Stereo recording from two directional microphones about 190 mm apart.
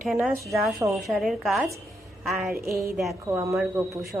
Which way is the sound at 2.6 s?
15° right (ahead or behind).